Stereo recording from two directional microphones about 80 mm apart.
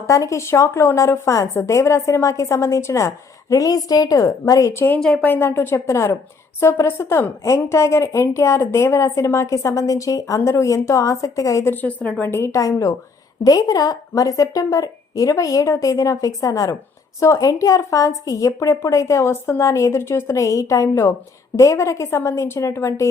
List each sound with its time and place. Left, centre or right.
0.1 s a woman's voice: left
3.5 s a woman's voice: left
4.7 s a woman's voice: left
4.9 s speech: centre
5.2 s a woman's voice: left
11.6 s a woman's voice: left
12.3 s a woman's voice: left
12.5 s a woman's voice: left